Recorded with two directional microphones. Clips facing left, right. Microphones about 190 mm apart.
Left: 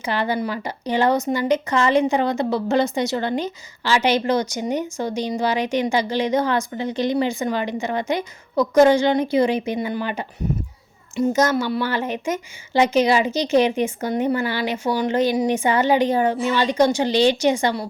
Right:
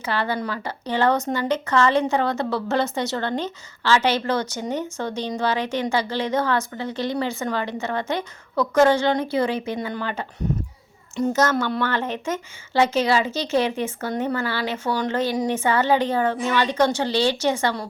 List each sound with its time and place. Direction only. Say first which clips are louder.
0.0 s a woman's voice: left 2 dB; 15° left (ahead or behind)